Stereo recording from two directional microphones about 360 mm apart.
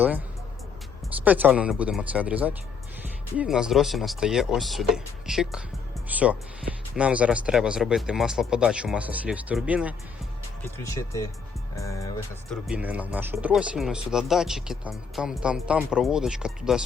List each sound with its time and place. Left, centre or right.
1.2 s speech: centre
10.8 s speech: centre
12.5 s speech: centre